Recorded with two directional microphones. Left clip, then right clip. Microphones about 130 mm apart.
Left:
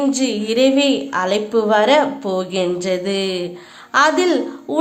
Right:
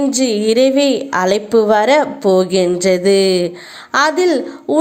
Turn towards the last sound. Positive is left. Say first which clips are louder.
# right 3 dB
turn(degrees=-35)  # may be behind; listen again after turning